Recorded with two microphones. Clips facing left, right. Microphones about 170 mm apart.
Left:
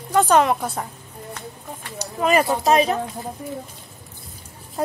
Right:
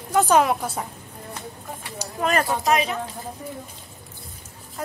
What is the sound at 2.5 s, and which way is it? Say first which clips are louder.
Speech: left 4 dB; 30° left (ahead or behind).